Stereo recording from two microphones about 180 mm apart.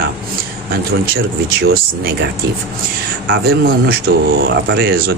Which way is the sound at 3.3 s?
60° right (ahead or behind).